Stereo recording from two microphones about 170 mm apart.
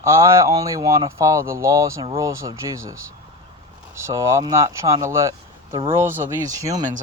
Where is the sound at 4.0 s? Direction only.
15° right (ahead or behind).